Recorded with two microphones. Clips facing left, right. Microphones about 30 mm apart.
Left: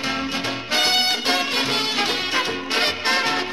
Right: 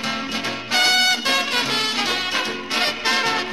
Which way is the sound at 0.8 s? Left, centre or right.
Right.